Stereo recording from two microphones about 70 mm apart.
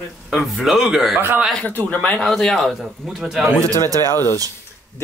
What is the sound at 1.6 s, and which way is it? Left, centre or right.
Speech, left.